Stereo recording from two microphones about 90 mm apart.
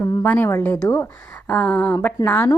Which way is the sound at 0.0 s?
30° left (ahead or behind).